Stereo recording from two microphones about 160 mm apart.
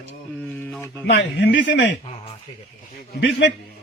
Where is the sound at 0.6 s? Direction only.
10° left (ahead or behind).